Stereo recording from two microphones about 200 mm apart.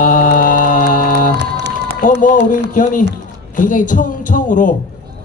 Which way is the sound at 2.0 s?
45° left (ahead or behind).